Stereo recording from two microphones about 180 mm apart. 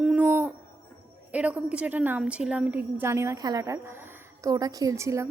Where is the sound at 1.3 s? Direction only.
5° right (ahead or behind).